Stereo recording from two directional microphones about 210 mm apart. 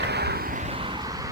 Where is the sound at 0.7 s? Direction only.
25° right (ahead or behind).